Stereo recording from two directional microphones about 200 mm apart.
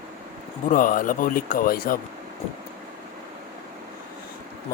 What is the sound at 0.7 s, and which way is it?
Speech, 40° left (ahead or behind).